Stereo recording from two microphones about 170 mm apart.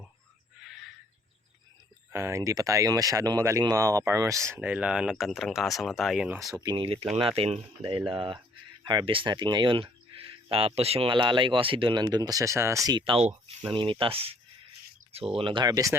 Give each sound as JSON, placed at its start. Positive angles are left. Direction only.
{"t": 2.1, "sound": "speech", "side_deg": -15}
{"t": 6.5, "sound": "speech", "side_deg": -25}